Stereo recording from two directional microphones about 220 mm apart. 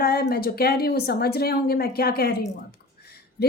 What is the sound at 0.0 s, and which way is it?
Speech, 45° left (ahead or behind).